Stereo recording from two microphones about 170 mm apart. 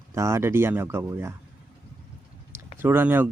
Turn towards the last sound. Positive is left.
turn(degrees=-10)  # may be behind; listen again after turning